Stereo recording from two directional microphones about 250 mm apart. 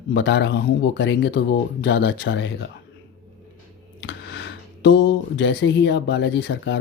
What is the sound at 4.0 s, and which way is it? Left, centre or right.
Speech, left.